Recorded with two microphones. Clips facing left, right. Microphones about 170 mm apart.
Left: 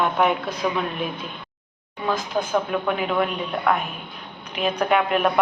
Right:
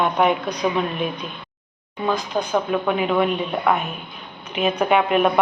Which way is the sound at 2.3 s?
15° right (ahead or behind).